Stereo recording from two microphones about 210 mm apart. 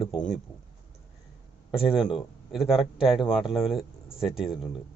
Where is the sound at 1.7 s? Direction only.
25° left (ahead or behind).